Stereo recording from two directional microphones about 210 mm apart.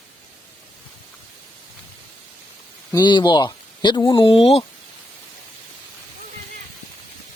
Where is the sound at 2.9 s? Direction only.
20° left (ahead or behind).